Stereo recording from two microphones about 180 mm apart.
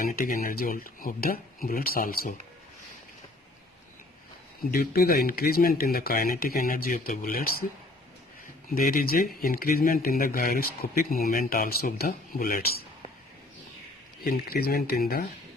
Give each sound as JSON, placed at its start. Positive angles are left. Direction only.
{"t": 0.0, "sound": "speech", "side_deg": 50}
{"t": 4.7, "sound": "speech", "side_deg": 55}
{"t": 8.7, "sound": "speech", "side_deg": 50}
{"t": 14.2, "sound": "speech", "side_deg": 55}